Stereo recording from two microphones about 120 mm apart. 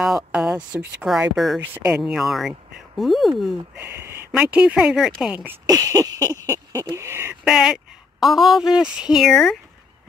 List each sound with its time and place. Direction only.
0.0 s speech: 5° right (ahead or behind)
1.6 s speech: 15° right (ahead or behind)
3.8 s speech: 20° right (ahead or behind)
5.7 s a sound: 30° right (ahead or behind)
7.4 s speech: 5° right (ahead or behind)